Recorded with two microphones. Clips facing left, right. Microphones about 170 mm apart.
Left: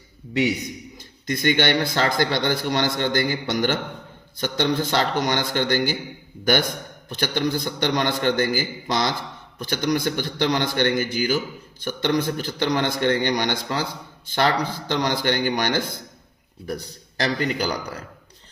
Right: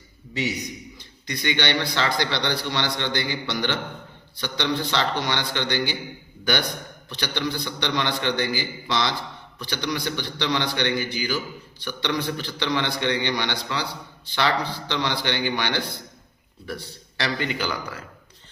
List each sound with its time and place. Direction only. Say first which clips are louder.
0.9 s a man's voice: left 6 dB; 50° left (ahead or behind)